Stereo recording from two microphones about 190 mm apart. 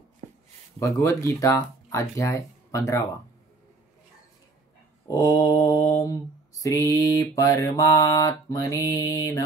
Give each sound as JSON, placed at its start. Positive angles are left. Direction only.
{"t": 0.7, "sound": "mantra", "side_deg": 15}
{"t": 5.0, "sound": "mantra", "side_deg": 20}